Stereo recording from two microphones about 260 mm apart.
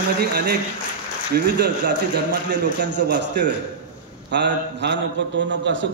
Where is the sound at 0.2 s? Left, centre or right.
Right.